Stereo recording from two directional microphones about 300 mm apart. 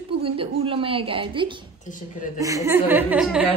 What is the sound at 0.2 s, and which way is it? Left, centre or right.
A woman's voice, centre.